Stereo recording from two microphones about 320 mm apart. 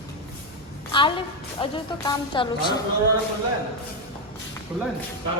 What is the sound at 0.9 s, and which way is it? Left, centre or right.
Speech, centre.